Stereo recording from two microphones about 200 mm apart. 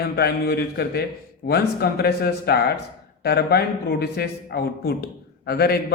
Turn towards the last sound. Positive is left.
turn(degrees=50)  # may be behind; listen again after turning